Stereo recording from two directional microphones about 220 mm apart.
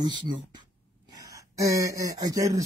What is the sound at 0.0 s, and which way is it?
Speech, 20° right (ahead or behind).